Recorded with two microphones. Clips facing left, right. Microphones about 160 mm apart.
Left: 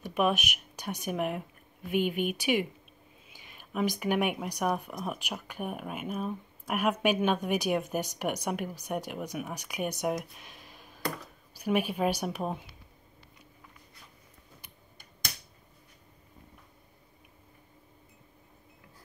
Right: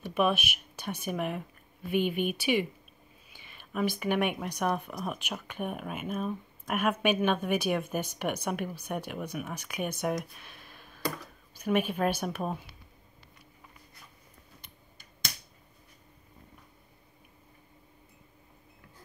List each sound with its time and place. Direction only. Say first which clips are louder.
0.0 s speech: even; 15° left (ahead or behind)